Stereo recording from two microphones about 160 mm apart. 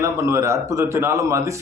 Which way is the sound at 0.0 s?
20° right (ahead or behind).